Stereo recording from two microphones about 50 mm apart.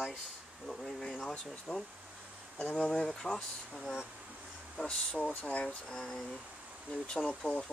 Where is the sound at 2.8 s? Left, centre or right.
Centre.